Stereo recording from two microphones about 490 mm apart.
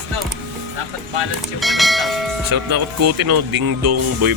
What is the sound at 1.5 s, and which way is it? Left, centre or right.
Church bell, centre.